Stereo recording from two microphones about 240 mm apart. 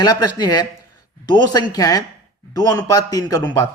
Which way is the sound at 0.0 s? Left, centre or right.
Centre.